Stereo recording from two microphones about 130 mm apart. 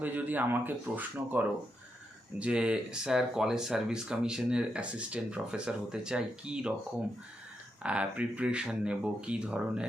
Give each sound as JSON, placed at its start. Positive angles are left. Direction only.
{"t": 0.0, "sound": "speech", "side_deg": -15}
{"t": 7.8, "sound": "speech", "side_deg": -10}